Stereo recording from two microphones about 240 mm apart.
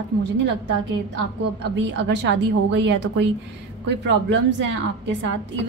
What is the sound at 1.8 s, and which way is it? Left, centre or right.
A woman's voice, right.